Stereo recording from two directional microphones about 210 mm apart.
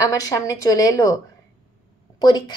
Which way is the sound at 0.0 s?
15° left (ahead or behind).